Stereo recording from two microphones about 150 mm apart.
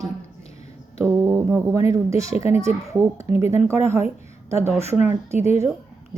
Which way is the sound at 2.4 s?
40° left (ahead or behind).